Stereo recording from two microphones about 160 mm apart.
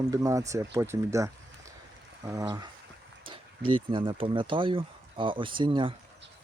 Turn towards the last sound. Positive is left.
turn(degrees=-30)  # may be behind; listen again after turning